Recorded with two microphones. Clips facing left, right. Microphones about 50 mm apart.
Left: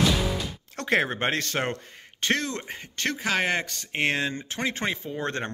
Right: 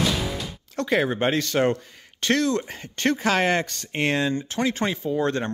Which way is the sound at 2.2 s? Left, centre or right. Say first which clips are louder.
Right 5 dB; left.